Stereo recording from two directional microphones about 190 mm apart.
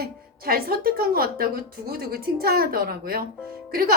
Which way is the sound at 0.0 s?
50° right (ahead or behind).